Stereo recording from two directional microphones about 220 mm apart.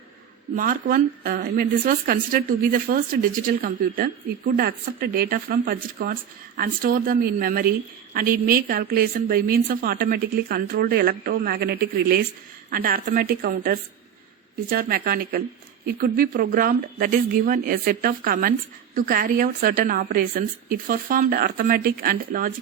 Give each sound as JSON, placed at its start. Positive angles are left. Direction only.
{"t": 0.5, "sound": "a woman's voice", "side_deg": -40}